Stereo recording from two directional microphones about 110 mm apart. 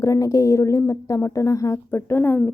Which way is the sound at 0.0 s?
30° left (ahead or behind).